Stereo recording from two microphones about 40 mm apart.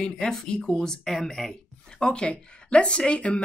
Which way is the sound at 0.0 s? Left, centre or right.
Centre.